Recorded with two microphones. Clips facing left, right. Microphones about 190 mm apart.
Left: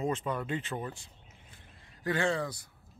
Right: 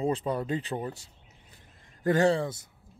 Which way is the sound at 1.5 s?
45° right (ahead or behind).